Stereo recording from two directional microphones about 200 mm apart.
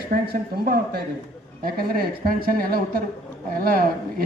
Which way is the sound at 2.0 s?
50° right (ahead or behind).